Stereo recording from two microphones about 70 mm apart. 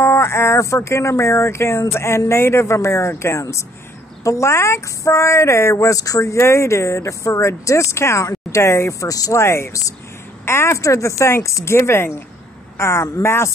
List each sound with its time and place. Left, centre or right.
0.0 s speech: left
9.4 s speech: left
10.4 s speech: left